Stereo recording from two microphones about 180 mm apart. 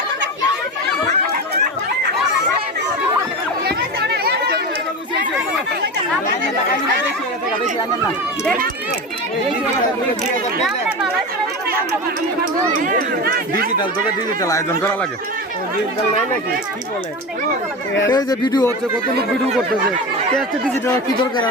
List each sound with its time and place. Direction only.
3.7 s chatter: 65° right (ahead or behind)
10.6 s speech: centre (ahead or behind)
12.8 s speech: 50° right (ahead or behind)
14.4 s speech: 20° left (ahead or behind)
18.1 s speech: 25° left (ahead or behind)